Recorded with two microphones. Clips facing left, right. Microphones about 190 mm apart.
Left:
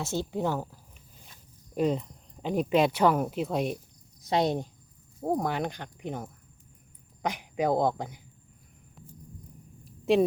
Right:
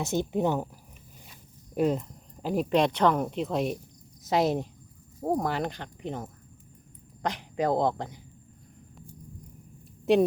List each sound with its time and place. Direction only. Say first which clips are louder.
0.0 s speech: right 3 dB; 20° right (ahead or behind)
1.7 s speech: right 1 dB; 5° right (ahead or behind)
9.8 s a sound: right 1 dB; centre (ahead or behind)